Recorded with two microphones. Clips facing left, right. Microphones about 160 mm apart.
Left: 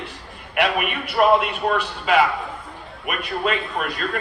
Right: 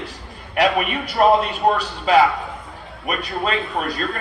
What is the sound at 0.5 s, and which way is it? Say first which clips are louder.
A man's voice: right 3 dB; 40° right (ahead or behind).